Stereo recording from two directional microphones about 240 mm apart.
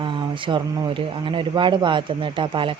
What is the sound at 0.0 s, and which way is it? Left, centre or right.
Speech, centre.